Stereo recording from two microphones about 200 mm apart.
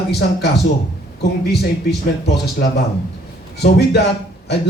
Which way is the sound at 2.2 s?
55° left (ahead or behind).